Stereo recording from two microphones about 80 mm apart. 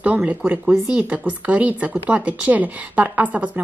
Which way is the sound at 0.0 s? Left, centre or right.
Centre.